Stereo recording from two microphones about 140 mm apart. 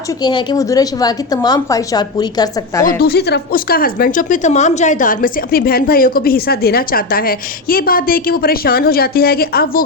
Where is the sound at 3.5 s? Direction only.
90° left.